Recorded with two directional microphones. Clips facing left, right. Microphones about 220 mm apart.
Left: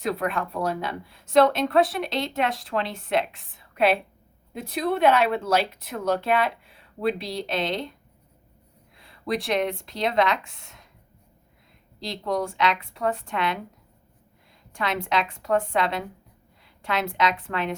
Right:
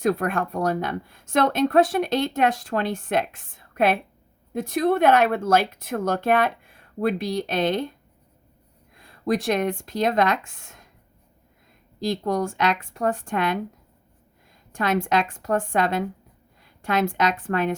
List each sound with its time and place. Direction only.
0.0 s speech: 45° right (ahead or behind)
9.0 s speech: 45° right (ahead or behind)
11.9 s speech: 45° right (ahead or behind)
14.7 s a woman's voice: 45° right (ahead or behind)